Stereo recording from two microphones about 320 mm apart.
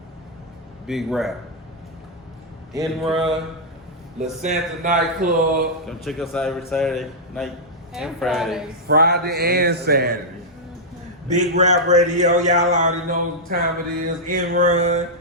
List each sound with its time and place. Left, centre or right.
0.9 s a man's voice: centre
2.7 s a man's voice: centre
4.2 s a man's voice: right
5.9 s a man's voice: centre
8.9 s a man's voice: right
11.3 s a man's voice: right